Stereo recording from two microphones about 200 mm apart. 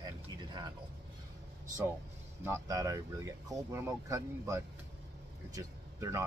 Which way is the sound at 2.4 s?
15° right (ahead or behind).